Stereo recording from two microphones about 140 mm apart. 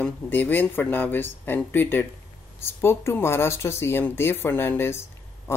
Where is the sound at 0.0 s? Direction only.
15° left (ahead or behind).